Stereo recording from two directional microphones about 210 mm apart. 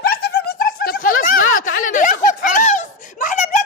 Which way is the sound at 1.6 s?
40° left (ahead or behind).